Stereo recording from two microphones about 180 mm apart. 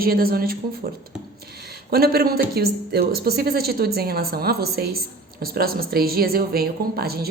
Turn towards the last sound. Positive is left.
turn(degrees=-60)  # may be behind; listen again after turning